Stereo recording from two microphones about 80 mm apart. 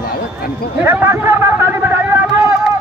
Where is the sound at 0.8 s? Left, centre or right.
Right.